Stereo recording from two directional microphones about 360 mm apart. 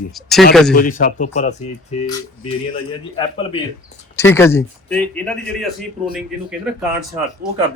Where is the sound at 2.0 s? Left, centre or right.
Centre.